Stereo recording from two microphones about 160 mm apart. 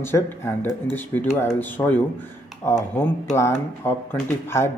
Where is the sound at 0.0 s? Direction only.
15° left (ahead or behind).